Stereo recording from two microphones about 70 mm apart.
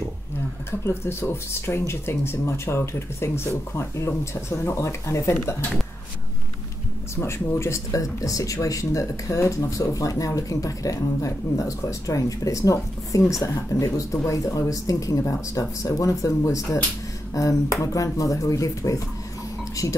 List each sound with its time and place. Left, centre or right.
0.7 s speech: left
7.2 s speech: left